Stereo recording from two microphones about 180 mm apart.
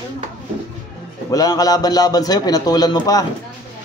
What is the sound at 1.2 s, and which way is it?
A man's voice, 20° left (ahead or behind).